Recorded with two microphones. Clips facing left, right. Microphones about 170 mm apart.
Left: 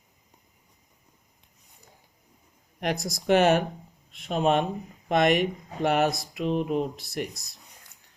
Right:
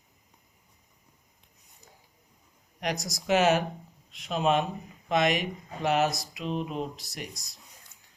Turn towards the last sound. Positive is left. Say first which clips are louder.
# left 8 dB
turn(degrees=60)  # may be behind; listen again after turning